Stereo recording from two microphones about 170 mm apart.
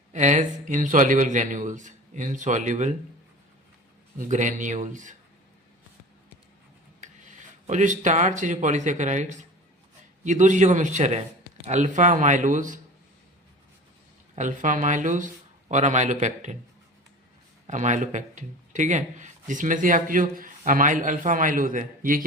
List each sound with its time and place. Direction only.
0.1 s speech: 45° right (ahead or behind)
4.2 s speech: 45° right (ahead or behind)
7.0 s speech: 45° right (ahead or behind)
10.2 s speech: 45° right (ahead or behind)
14.3 s speech: 45° right (ahead or behind)
17.7 s speech: 45° right (ahead or behind)